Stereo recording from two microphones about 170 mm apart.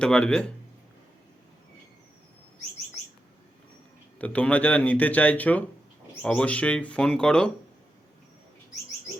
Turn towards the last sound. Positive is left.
turn(degrees=5)  # may be behind; listen again after turning